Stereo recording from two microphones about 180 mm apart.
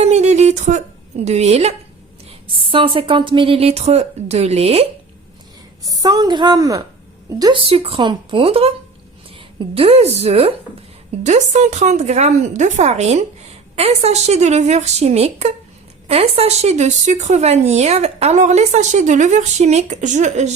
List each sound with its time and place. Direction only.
0.0 s a sound: 40° right (ahead or behind)
1.2 s speech: 35° right (ahead or behind)
5.8 s a woman's voice: 20° right (ahead or behind)
7.7 s speech: 35° right (ahead or behind)
9.7 s speech: 35° right (ahead or behind)